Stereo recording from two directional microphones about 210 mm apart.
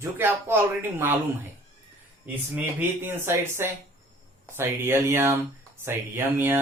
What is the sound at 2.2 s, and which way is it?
Speech, 10° right (ahead or behind).